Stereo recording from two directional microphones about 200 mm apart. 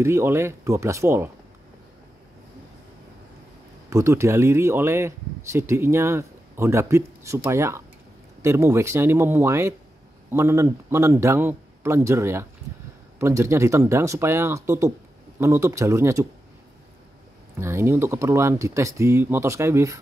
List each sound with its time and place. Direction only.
0.0 s speech: 10° right (ahead or behind)
3.9 s speech: 15° right (ahead or behind)
17.6 s speech: 10° right (ahead or behind)